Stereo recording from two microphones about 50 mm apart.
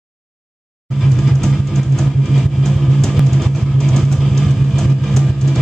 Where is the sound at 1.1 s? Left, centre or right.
Centre.